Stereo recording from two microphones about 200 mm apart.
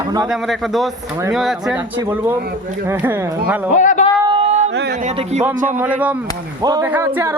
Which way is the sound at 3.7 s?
40° left (ahead or behind).